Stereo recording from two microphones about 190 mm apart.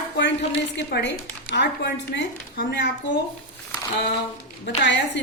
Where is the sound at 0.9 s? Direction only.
60° left (ahead or behind).